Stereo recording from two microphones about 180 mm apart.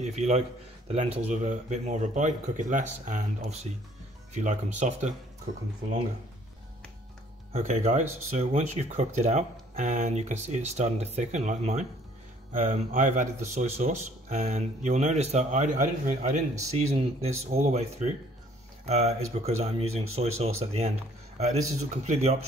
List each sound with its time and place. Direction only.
0.0 s a man's voice: 35° right (ahead or behind)
7.5 s speech: 40° right (ahead or behind)